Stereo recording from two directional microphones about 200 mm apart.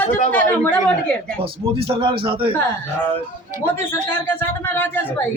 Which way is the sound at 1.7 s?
30° right (ahead or behind).